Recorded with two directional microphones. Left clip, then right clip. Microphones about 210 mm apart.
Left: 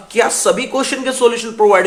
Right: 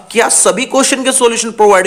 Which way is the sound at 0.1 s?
35° right (ahead or behind).